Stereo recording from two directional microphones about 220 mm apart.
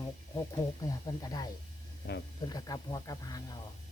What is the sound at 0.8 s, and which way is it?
Speech, 15° left (ahead or behind).